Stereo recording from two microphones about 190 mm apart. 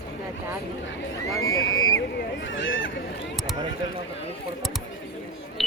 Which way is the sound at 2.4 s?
75° left (ahead or behind).